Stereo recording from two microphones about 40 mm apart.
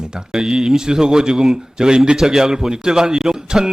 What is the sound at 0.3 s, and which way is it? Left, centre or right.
A man's voice, centre.